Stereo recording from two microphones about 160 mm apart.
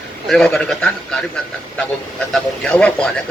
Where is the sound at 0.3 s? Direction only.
5° left (ahead or behind).